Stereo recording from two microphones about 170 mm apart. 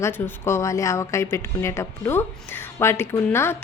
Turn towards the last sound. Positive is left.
turn(degrees=15)  # may be behind; listen again after turning